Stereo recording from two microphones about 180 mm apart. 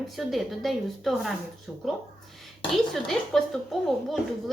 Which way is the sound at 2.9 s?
Centre (ahead or behind).